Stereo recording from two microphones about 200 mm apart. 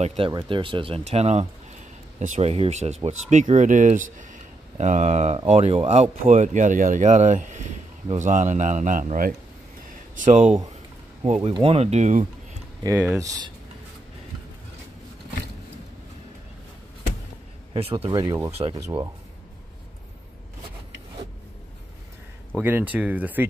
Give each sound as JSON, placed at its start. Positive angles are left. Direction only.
{"t": 0.0, "sound": "speech", "side_deg": -30}
{"t": 12.8, "sound": "speech", "side_deg": -10}
{"t": 17.7, "sound": "speech", "side_deg": -30}
{"t": 22.6, "sound": "speech", "side_deg": -10}